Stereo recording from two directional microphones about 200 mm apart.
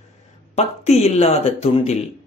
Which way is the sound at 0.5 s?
30° left (ahead or behind).